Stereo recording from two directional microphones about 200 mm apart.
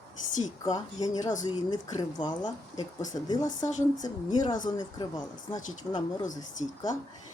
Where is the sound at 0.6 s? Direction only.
20° left (ahead or behind).